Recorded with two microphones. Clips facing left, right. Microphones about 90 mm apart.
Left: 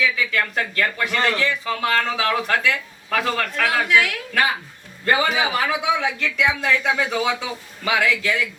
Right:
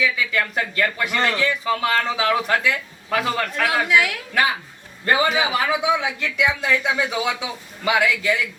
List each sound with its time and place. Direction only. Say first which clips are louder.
0.3 s a man's voice: even; 10° right (ahead or behind)